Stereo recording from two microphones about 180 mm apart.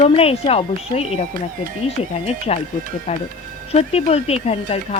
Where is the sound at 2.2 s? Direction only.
35° left (ahead or behind).